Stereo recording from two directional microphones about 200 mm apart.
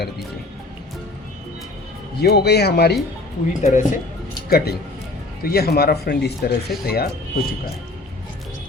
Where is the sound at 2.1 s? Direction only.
55° left (ahead or behind).